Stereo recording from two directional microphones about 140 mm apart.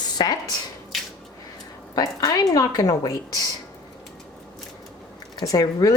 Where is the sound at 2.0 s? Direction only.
25° left (ahead or behind).